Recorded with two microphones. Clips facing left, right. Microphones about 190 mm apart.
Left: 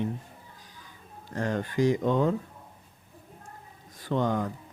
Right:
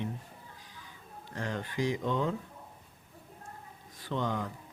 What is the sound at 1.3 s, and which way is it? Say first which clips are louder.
Speech: left 7 dB; 45° left (ahead or behind).